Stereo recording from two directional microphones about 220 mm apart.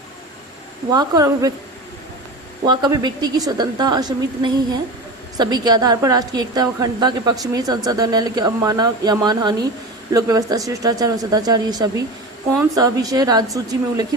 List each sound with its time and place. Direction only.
0.9 s a woman's voice: 15° right (ahead or behind)
2.6 s a woman's voice: 20° right (ahead or behind)